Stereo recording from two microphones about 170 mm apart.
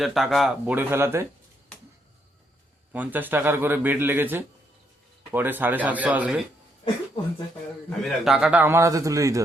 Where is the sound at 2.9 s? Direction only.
10° right (ahead or behind).